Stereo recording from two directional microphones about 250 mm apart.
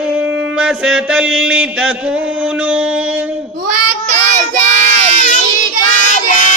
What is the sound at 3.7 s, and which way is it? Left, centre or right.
Child singing, right.